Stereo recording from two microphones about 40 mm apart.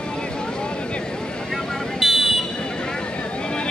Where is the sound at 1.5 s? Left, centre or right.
Centre.